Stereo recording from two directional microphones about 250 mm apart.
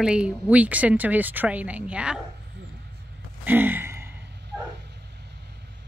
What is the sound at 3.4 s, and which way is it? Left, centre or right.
Gasp, centre.